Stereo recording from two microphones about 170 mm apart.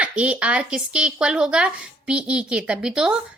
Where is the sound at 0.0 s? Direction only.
5° right (ahead or behind).